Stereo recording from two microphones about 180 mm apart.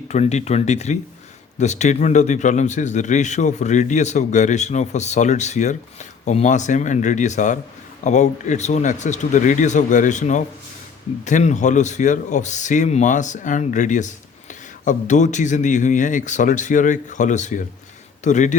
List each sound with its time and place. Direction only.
0.1 s a man's voice: 40° left (ahead or behind)